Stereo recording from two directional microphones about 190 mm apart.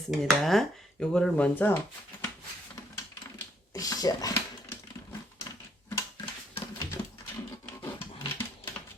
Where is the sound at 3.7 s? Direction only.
20° left (ahead or behind).